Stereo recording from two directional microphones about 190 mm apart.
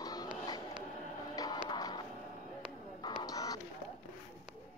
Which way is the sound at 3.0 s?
20° left (ahead or behind).